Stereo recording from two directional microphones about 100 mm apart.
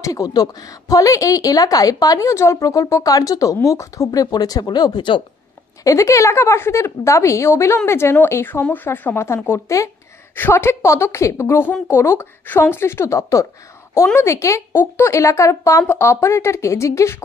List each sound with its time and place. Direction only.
0.0 s a woman's voice: 35° left (ahead or behind)
5.9 s a woman's voice: 30° left (ahead or behind)